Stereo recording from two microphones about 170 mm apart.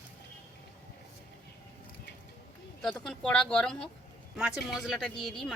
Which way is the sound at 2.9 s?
5° left (ahead or behind).